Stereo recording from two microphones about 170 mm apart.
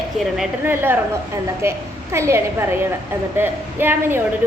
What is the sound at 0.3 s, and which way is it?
A woman's voice, 10° right (ahead or behind).